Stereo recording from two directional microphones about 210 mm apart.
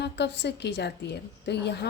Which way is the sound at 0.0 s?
55° left (ahead or behind).